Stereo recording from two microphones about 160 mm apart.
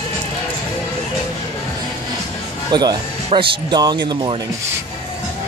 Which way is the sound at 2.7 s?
30° right (ahead or behind).